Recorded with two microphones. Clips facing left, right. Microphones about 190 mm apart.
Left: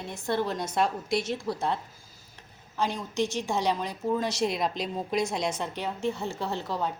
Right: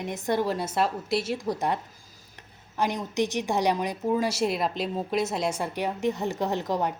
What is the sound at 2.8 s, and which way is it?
A woman's voice, 15° right (ahead or behind).